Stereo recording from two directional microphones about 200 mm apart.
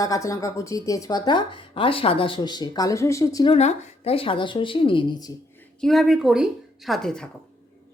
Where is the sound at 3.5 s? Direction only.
30° left (ahead or behind).